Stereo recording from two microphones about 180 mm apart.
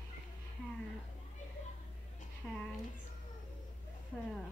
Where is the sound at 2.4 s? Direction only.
5° left (ahead or behind).